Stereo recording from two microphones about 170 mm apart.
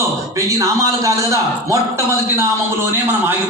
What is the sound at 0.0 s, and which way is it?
A man's voice, 20° right (ahead or behind).